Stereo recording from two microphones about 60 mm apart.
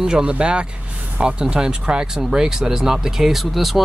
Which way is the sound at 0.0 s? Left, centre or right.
Centre.